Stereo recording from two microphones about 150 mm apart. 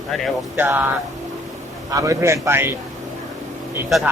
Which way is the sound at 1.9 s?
20° right (ahead or behind).